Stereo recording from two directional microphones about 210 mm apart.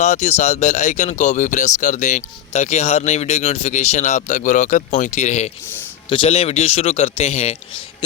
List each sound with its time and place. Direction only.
0.0 s a man's voice: 30° left (ahead or behind)